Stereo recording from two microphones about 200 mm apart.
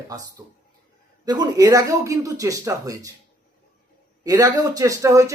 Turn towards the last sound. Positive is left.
turn(degrees=-15)  # may be behind; listen again after turning